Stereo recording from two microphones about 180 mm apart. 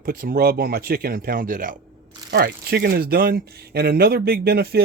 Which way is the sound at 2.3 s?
60° right (ahead or behind).